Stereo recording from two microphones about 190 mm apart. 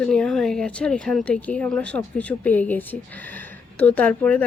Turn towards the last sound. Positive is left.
turn(degrees=10)  # may be behind; listen again after turning